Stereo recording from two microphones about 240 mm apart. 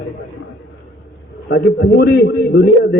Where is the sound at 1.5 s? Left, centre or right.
Left.